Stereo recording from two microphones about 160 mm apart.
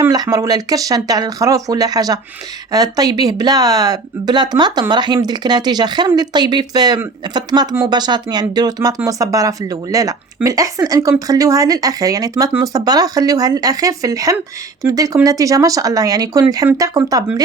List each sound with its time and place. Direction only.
0.0 s speech: 25° right (ahead or behind)